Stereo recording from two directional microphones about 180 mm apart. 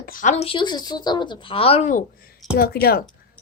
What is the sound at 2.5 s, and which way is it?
Speech, 60° left (ahead or behind).